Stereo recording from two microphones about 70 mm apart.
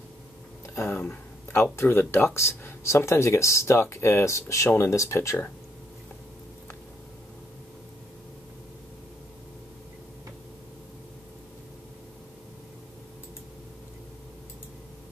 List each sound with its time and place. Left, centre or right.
0.7 s speech: left